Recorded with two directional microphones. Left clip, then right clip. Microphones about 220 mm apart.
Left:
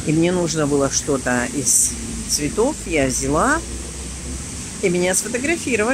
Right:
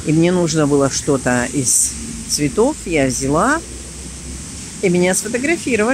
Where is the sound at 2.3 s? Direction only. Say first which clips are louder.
Right 4 dB; 15° right (ahead or behind).